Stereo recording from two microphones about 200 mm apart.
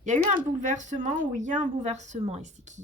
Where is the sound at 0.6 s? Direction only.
40° right (ahead or behind).